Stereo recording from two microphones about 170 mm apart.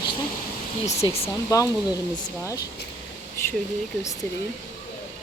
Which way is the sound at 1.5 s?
20° left (ahead or behind).